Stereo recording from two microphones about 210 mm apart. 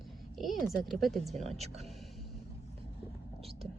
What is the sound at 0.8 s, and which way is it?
Speech, centre (ahead or behind).